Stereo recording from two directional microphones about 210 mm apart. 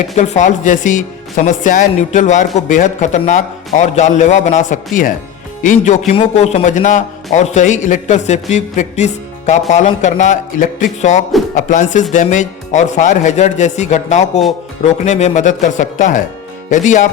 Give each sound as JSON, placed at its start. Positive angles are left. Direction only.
{"t": 0.2, "sound": "a man's voice", "side_deg": 35}